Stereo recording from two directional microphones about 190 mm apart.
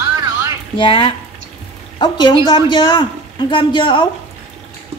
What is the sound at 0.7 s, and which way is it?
A woman's voice, 25° left (ahead or behind).